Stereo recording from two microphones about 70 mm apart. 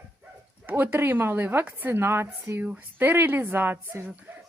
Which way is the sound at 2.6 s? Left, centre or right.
Right.